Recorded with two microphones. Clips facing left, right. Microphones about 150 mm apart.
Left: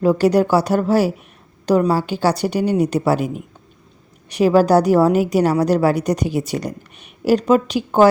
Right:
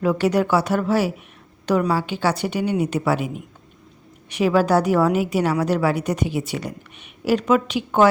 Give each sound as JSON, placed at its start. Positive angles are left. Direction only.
{"t": 0.0, "sound": "a woman's voice", "side_deg": 35}